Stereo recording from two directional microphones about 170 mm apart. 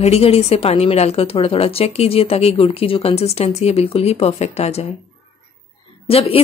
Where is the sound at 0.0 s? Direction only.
35° left (ahead or behind).